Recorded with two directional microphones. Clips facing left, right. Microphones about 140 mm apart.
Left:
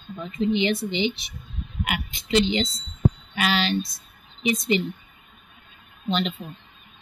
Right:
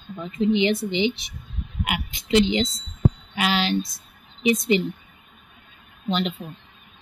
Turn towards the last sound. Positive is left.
turn(degrees=-15)  # may be behind; listen again after turning